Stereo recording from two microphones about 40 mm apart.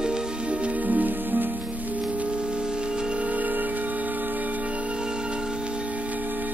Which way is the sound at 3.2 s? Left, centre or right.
Right.